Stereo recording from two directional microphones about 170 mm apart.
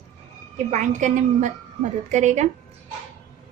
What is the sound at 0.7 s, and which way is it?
A woman's voice, 45° right (ahead or behind).